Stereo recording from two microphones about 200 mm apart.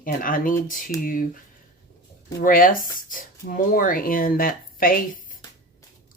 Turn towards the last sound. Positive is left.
turn(degrees=45)  # may be behind; listen again after turning